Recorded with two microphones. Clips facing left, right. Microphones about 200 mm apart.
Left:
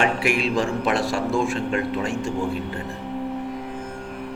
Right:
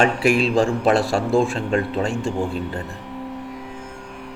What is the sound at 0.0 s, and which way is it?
A man's voice, 35° right (ahead or behind).